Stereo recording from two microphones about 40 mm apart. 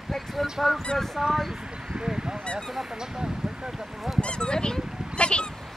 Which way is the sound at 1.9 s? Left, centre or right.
Right.